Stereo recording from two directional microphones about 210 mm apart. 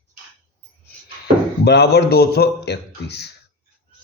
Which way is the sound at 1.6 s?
50° left (ahead or behind).